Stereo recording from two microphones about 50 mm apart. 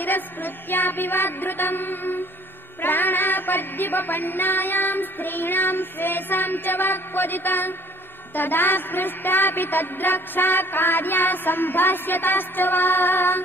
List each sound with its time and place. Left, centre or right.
0.0 s music: left